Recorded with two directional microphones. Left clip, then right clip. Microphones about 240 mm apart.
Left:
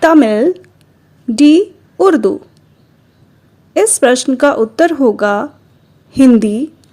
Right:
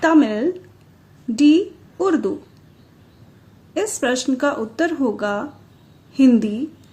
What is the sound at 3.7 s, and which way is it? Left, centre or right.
Speech, left.